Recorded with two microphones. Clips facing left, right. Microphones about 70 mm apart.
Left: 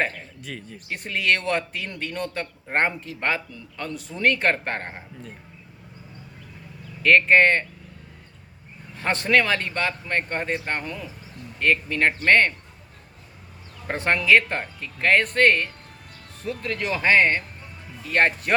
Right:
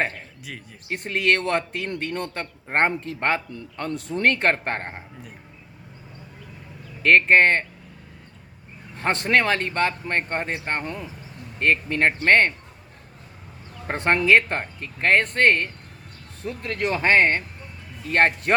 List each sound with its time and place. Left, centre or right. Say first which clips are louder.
0.4 s speech: left 4 dB; centre
0.9 s speech: right 2 dB; right
4.9 s speech: even; centre
7.0 s speech: even; right
9.2 s speech: even; right
13.8 s speech: right 1 dB; right